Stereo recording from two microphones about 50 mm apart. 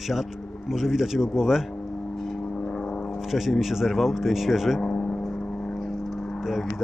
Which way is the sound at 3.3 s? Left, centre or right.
Centre.